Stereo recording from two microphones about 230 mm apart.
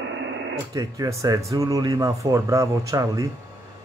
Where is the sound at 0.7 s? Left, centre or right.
Centre.